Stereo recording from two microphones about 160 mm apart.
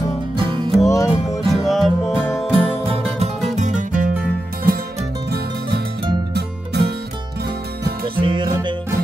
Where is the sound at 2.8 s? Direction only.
40° right (ahead or behind).